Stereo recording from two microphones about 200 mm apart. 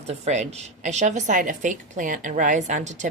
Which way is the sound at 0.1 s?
35° right (ahead or behind).